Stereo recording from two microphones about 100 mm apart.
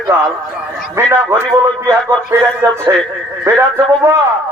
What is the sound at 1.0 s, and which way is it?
Speech, 30° right (ahead or behind).